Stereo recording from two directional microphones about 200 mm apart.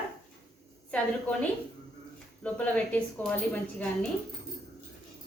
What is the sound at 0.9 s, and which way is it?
Speech, 5° left (ahead or behind).